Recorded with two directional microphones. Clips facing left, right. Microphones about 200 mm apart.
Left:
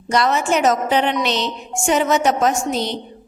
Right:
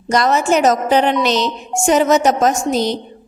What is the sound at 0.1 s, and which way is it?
A woman's voice, 40° right (ahead or behind).